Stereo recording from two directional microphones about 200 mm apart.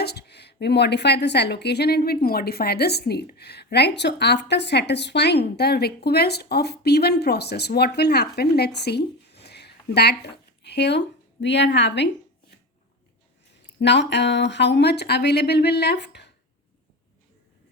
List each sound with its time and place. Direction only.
0.0 s speech: 55° left (ahead or behind)
13.7 s speech: 60° left (ahead or behind)